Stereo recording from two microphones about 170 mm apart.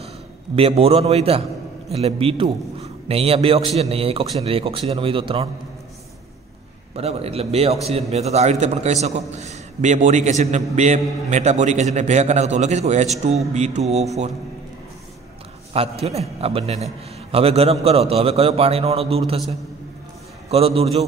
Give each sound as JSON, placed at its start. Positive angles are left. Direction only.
{"t": 0.6, "sound": "a man's voice", "side_deg": -35}
{"t": 7.0, "sound": "a man's voice", "side_deg": -35}
{"t": 15.7, "sound": "a man's voice", "side_deg": -35}
{"t": 20.4, "sound": "a man's voice", "side_deg": -35}